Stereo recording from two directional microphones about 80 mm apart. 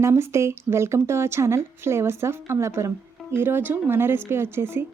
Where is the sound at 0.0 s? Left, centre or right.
Right.